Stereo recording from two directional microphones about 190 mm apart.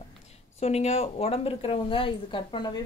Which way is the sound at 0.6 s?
35° left (ahead or behind).